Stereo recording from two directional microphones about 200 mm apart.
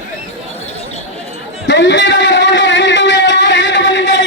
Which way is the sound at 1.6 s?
65° left (ahead or behind).